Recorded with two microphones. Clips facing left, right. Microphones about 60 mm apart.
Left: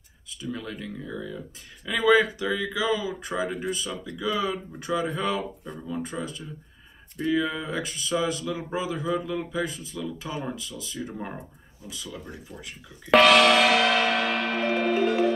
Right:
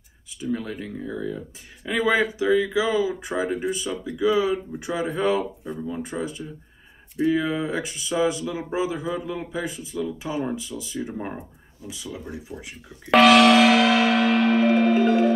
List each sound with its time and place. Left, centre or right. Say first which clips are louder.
0.4 s speech: right 5 dB; right; by 15.0 s centre